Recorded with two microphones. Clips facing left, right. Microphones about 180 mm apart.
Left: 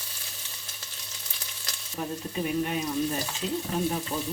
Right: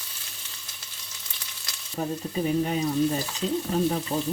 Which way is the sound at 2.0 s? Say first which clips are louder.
Right 3 dB; 40° right (ahead or behind).